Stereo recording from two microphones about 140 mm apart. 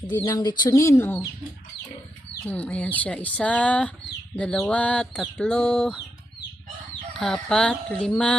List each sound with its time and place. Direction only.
0.1 s speech: 25° left (ahead or behind)
2.4 s speech: 10° left (ahead or behind)
7.2 s speech: 5° left (ahead or behind)